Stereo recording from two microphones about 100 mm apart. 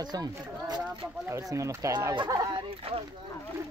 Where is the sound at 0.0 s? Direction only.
45° right (ahead or behind).